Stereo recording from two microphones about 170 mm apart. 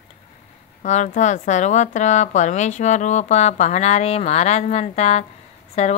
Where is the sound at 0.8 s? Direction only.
45° left (ahead or behind).